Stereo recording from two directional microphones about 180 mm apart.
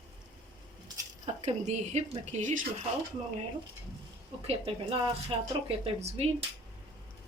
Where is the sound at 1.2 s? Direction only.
35° right (ahead or behind).